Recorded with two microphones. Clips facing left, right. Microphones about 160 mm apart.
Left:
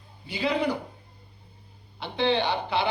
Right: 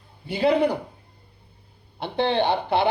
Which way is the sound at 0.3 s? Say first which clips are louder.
Right 6 dB; 60° right (ahead or behind).